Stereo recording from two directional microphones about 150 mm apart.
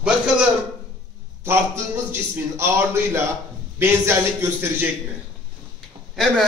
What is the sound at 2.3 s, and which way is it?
A man's voice, 15° right (ahead or behind).